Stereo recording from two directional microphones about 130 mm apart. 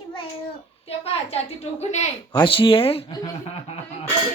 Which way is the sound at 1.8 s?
60° left (ahead or behind).